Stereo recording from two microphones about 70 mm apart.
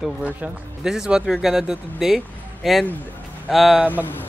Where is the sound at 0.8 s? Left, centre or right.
Centre.